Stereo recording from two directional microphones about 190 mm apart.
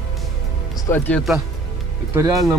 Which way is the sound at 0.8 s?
10° left (ahead or behind).